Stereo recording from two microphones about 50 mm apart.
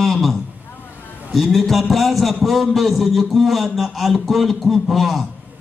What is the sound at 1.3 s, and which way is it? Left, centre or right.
A man's voice, centre.